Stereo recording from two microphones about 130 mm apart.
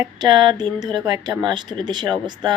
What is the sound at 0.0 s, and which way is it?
Speech, 35° right (ahead or behind).